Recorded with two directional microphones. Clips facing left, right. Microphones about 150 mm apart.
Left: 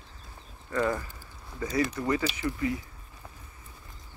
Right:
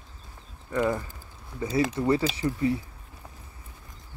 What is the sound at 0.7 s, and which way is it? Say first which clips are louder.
Speech: right 2 dB; 10° right (ahead or behind).